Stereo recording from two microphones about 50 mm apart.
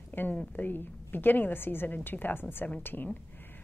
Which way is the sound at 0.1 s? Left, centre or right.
Left.